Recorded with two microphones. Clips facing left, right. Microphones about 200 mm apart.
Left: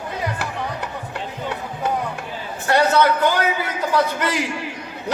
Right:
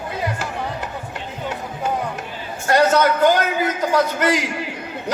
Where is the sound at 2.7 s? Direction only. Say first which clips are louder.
Right 1 dB; 45° right (ahead or behind).